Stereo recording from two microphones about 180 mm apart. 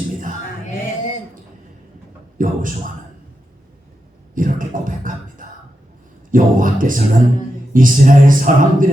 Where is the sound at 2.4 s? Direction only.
50° right (ahead or behind).